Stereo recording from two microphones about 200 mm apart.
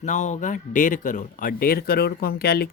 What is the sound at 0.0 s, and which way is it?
Speech, 35° left (ahead or behind).